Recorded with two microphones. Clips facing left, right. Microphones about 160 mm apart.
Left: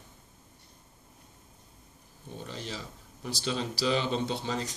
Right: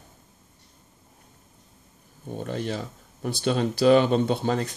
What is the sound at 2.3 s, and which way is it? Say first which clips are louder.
Speech: right 10 dB; 55° right (ahead or behind).